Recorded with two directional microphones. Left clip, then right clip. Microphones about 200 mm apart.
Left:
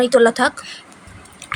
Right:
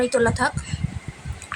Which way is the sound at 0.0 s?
15° left (ahead or behind).